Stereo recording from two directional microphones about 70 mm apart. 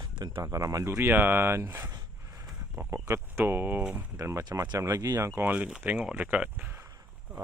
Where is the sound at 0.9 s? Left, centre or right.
Right.